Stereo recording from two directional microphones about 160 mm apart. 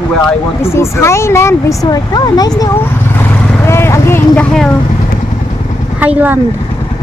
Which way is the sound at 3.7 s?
15° left (ahead or behind).